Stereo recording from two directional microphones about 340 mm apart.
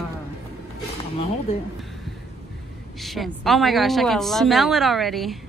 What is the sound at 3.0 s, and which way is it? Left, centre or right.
Speech, centre.